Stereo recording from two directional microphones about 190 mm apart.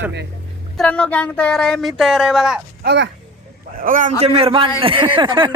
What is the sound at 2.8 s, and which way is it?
Speech, 65° right (ahead or behind).